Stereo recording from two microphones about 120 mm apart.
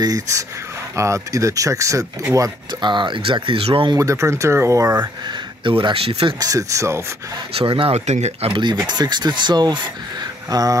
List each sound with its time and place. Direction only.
0.0 s speech: 30° right (ahead or behind)
2.8 s speech: 40° right (ahead or behind)
3.9 s speech: 25° right (ahead or behind)
5.6 s speech: 45° right (ahead or behind)
6.4 s speech: 25° right (ahead or behind)
7.5 s speech: 50° right (ahead or behind)
8.1 s speech: 65° right (ahead or behind)
8.7 s speech: 35° right (ahead or behind)